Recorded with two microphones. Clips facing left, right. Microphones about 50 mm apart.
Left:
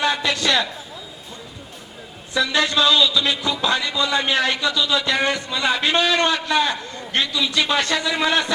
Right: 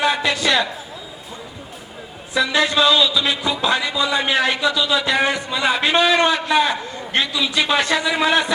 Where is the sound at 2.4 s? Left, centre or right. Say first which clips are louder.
Right 2 dB; centre.